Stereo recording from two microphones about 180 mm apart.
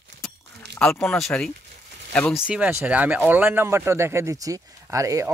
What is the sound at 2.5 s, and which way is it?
Speech, 10° right (ahead or behind).